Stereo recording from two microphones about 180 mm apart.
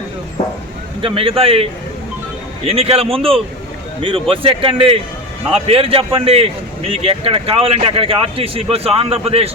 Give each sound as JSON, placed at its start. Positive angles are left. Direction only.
{"t": 1.0, "sound": "speech", "side_deg": -30}
{"t": 2.6, "sound": "speech", "side_deg": -35}